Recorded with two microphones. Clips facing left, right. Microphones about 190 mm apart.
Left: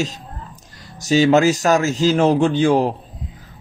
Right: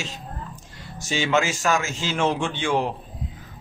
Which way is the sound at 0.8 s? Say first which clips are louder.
Left 11 dB; 40° left (ahead or behind).